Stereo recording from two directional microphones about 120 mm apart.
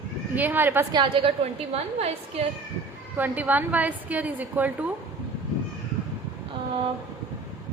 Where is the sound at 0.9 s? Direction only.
45° right (ahead or behind).